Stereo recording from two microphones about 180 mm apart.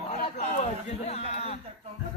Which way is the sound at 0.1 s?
40° left (ahead or behind).